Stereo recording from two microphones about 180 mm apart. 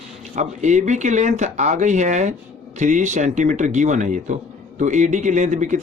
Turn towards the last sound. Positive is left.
turn(degrees=-45)  # may be behind; listen again after turning